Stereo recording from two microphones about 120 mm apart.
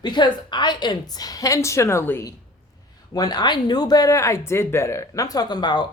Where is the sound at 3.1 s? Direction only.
35° left (ahead or behind).